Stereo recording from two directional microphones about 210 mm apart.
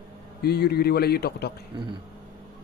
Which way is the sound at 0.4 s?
50° left (ahead or behind).